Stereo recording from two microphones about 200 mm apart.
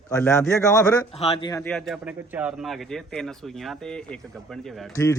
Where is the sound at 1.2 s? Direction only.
30° left (ahead or behind).